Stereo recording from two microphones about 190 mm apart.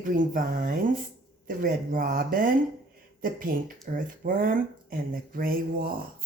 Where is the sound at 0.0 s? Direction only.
45° right (ahead or behind).